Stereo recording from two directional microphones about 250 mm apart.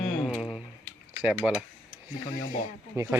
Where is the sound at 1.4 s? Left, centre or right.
Centre.